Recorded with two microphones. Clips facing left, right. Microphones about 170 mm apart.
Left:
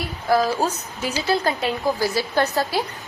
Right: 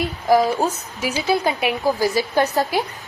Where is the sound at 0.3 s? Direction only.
20° right (ahead or behind).